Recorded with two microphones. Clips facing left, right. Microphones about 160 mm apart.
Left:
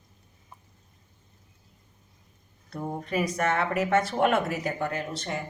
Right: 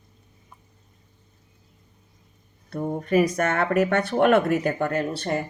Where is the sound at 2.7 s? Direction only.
60° right (ahead or behind).